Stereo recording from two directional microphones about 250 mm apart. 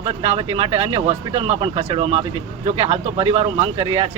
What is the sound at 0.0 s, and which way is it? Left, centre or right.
Speech, right.